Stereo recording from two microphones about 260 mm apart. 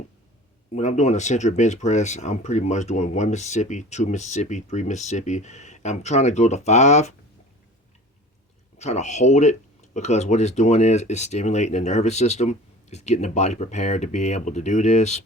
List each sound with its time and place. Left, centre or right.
0.7 s speech: left
8.8 s speech: left